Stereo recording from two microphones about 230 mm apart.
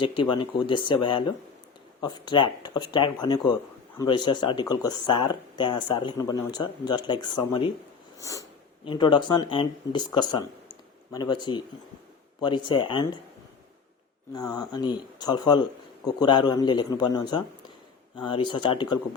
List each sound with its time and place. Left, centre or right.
0.0 s speech: left
14.3 s speech: centre